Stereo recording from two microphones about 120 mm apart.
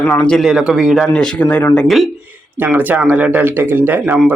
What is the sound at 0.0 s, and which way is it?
Speech, 20° left (ahead or behind).